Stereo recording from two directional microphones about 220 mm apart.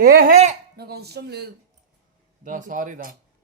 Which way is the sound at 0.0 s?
40° right (ahead or behind).